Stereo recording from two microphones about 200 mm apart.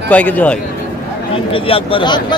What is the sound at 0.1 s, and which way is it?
Speech, 5° left (ahead or behind).